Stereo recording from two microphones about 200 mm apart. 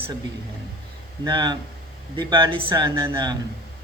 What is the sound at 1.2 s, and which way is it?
A man's voice, 20° right (ahead or behind).